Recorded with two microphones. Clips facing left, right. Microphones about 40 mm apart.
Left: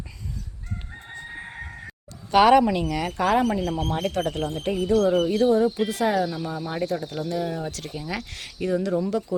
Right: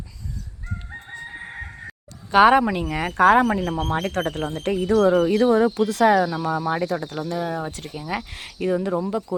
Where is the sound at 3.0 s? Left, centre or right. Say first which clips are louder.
Right 7 dB; right.